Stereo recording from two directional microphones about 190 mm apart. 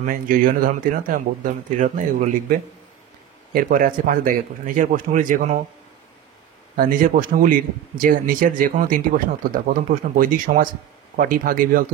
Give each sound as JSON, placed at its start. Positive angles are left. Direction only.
{"t": 0.0, "sound": "speech", "side_deg": -45}
{"t": 6.8, "sound": "speech", "side_deg": -45}